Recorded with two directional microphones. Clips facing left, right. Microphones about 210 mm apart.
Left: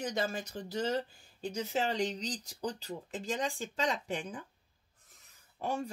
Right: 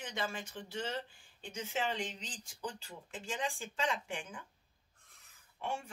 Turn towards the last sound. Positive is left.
turn(degrees=40)  # may be behind; listen again after turning